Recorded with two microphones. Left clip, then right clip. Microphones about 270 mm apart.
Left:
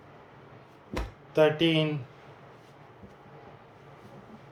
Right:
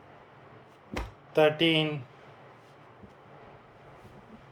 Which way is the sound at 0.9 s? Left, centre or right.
Centre.